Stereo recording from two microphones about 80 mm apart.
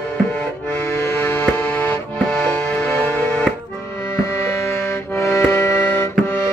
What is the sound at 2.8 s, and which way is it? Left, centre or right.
Music, left.